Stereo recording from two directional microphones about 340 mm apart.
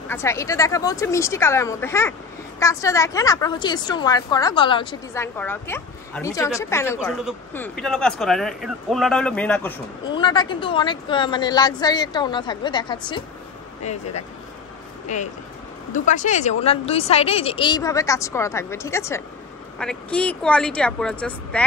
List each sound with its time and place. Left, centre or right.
0.1 s a woman's voice: centre
15.1 s a woman's voice: left; by 21.6 s centre